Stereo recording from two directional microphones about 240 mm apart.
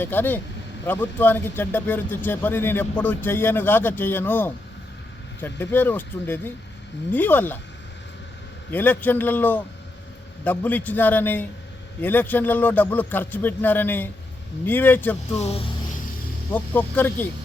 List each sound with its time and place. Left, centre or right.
0.0 s speech: centre
8.7 s speech: centre
15.4 s speech: left
16.5 s speech: centre